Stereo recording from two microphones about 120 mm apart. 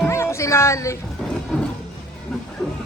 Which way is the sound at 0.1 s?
25° left (ahead or behind).